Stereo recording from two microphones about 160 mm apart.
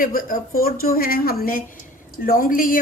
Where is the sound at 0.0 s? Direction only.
60° left (ahead or behind).